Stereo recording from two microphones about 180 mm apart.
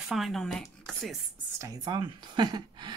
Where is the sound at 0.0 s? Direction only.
Centre (ahead or behind).